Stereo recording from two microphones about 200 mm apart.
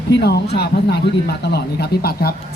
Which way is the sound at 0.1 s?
55° left (ahead or behind).